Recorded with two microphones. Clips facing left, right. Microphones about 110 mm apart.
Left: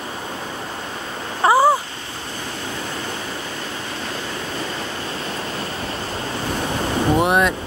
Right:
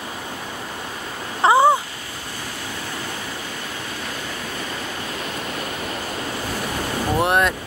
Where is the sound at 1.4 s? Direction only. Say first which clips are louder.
Even; 25° right (ahead or behind).